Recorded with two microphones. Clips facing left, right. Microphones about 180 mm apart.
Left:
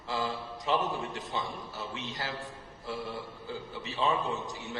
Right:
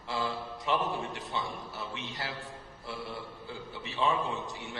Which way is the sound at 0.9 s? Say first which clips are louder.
Even; 40° left (ahead or behind).